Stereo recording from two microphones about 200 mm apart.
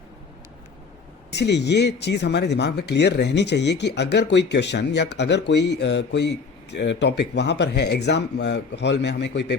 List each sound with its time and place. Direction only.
1.3 s speech: 60° left (ahead or behind)